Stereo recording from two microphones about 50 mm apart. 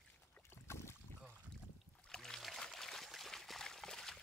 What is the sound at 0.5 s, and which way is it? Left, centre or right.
Boat, left.